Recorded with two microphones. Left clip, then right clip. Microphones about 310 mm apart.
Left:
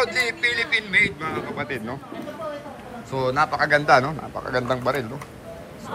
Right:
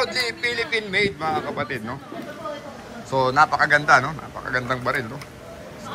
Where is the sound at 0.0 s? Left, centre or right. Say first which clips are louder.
Left 2 dB; centre.